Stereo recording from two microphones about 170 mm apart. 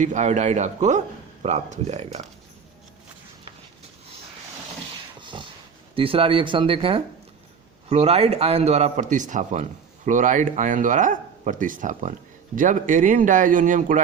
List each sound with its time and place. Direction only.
0.0 s speech: 45° right (ahead or behind)
5.2 s a sound: 30° right (ahead or behind)
6.0 s a man's voice: 30° right (ahead or behind); by 14.0 s 50° right (ahead or behind)